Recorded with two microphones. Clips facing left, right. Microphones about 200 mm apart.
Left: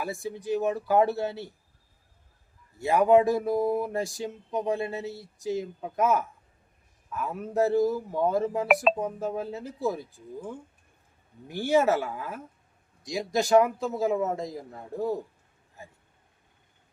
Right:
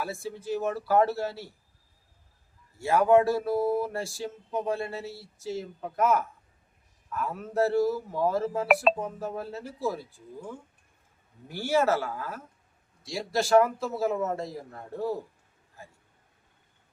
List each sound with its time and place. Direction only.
0.0 s speech: 15° left (ahead or behind)
2.7 s speech: 20° left (ahead or behind)
8.6 s speech: centre (ahead or behind)
9.0 s speech: 20° left (ahead or behind)
11.4 s speech: 15° left (ahead or behind)